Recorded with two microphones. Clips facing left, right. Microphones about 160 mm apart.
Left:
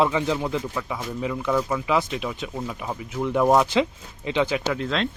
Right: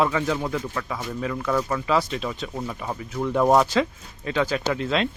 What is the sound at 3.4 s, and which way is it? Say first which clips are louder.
Speech: even; centre (ahead or behind).